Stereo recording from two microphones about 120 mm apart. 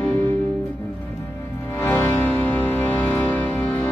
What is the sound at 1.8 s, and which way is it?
Music, 15° left (ahead or behind).